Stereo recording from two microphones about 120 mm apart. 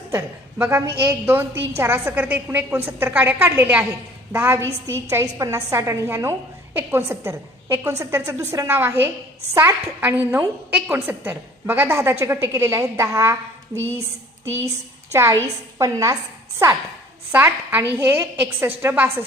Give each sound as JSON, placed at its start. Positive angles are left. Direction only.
{"t": 0.1, "sound": "a woman's voice", "side_deg": -20}
{"t": 15.1, "sound": "a woman's voice", "side_deg": -25}
{"t": 17.3, "sound": "a woman's voice", "side_deg": -15}